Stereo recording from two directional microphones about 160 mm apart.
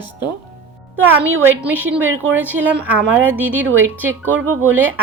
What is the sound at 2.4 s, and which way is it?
A woman's voice, 10° right (ahead or behind).